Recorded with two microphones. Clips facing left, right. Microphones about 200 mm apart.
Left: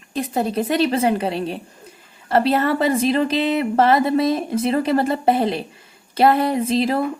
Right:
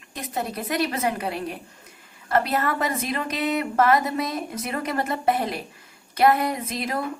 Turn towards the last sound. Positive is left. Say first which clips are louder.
# left 9 dB
turn(degrees=30)  # may be behind; listen again after turning